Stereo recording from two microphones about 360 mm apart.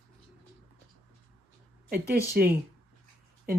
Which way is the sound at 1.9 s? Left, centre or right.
Right.